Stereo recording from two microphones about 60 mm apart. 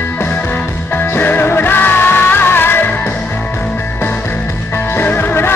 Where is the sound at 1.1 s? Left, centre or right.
Left.